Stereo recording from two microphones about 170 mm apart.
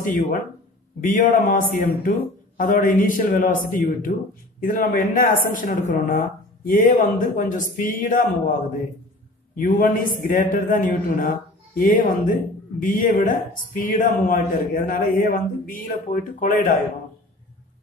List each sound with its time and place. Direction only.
0.0 s a man's voice: 55° left (ahead or behind)
9.6 s a man's voice: 50° left (ahead or behind)